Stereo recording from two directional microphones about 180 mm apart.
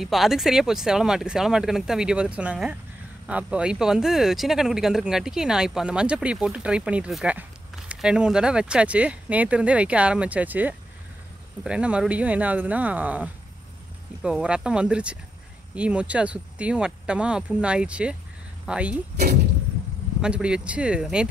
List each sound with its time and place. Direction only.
0.0 s speech: centre (ahead or behind)
19.1 s speech: 55° right (ahead or behind)
20.2 s speech: 5° right (ahead or behind)